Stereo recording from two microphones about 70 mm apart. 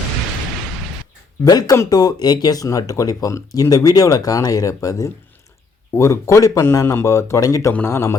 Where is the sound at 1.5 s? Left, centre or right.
Left.